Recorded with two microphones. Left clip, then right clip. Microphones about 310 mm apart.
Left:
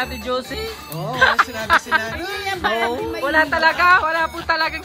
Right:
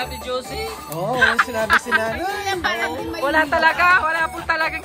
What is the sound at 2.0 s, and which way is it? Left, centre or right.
Speech, right.